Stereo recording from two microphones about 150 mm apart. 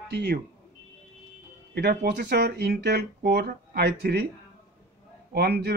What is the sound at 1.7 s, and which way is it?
Speech, 90° right.